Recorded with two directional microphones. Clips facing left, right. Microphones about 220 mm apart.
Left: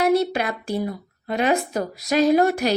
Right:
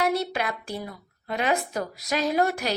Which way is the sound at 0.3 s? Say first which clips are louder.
Left 6 dB; 35° left (ahead or behind).